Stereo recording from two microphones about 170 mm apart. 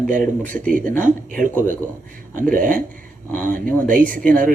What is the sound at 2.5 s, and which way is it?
Speech, 55° right (ahead or behind).